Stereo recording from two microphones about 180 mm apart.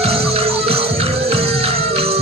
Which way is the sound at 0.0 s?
35° right (ahead or behind).